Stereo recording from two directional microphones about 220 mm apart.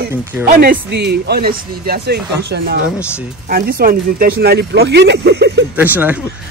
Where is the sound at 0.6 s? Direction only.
50° right (ahead or behind).